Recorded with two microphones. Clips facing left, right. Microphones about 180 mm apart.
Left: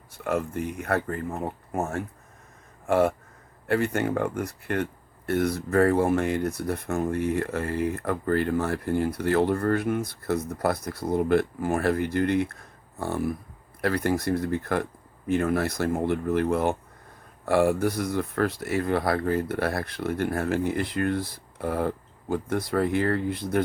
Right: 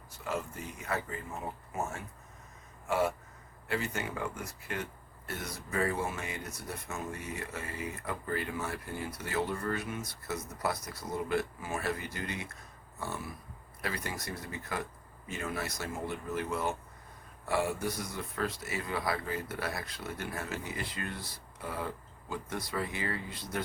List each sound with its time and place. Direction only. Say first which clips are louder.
0.3 s speech: left 10 dB; 60° left (ahead or behind)